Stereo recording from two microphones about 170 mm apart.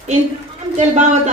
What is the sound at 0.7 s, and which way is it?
Speech, 45° right (ahead or behind).